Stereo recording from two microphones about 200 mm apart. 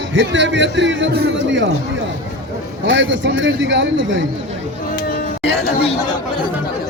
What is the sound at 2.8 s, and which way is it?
A man's voice, 65° right (ahead or behind).